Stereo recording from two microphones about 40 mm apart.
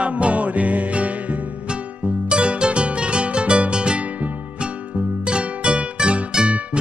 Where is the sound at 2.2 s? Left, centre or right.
Right.